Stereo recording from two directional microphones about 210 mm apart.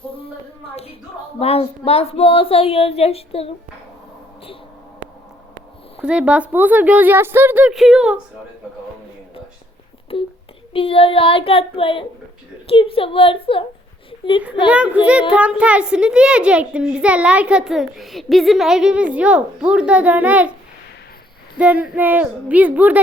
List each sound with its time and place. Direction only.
1.4 s speech: 25° left (ahead or behind)
6.0 s speech: 5° right (ahead or behind)
10.1 s speech: 25° left (ahead or behind)
14.1 s a sound: 25° left (ahead or behind)
14.7 s a child's voice: 5° right (ahead or behind)
21.6 s speech: 5° right (ahead or behind)